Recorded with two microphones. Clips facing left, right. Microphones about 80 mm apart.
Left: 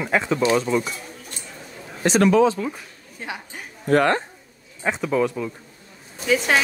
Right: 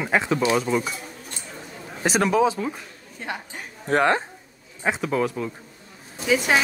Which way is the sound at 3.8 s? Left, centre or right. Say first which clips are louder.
Left 2 dB; centre.